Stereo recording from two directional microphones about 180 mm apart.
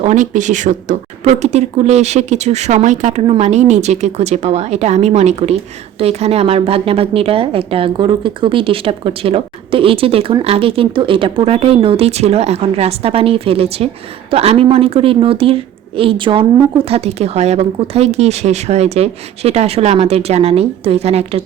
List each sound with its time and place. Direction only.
0.0 s speech: 45° right (ahead or behind)